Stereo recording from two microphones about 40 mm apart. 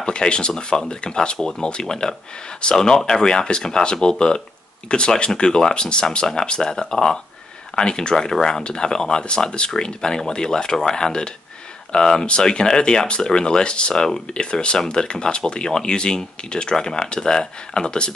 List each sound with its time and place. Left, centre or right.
0.0 s speech: left